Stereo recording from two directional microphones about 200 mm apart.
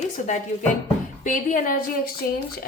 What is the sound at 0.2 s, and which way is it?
A woman's voice, 40° left (ahead or behind).